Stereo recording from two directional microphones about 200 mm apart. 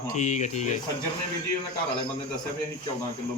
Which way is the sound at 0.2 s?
35° left (ahead or behind).